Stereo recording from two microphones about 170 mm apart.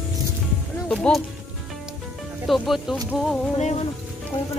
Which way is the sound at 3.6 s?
40° left (ahead or behind).